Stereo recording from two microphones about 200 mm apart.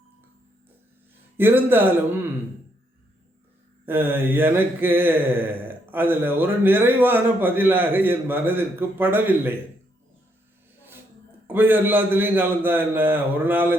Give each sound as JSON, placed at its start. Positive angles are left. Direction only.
{"t": 1.4, "sound": "mantra", "side_deg": -10}
{"t": 3.8, "sound": "mantra", "side_deg": -10}
{"t": 11.4, "sound": "mantra", "side_deg": -10}